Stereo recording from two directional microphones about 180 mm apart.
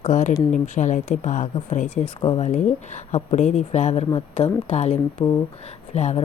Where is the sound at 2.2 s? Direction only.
25° left (ahead or behind).